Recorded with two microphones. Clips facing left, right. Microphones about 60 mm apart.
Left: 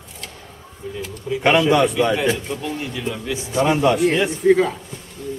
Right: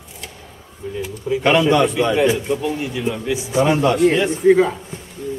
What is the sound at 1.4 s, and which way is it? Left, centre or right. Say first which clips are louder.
A man's voice: right 1 dB; centre.